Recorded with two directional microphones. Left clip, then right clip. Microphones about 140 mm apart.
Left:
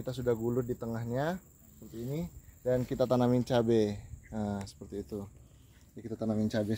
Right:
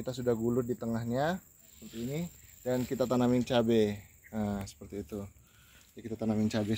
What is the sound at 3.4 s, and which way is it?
Speech, 90° left.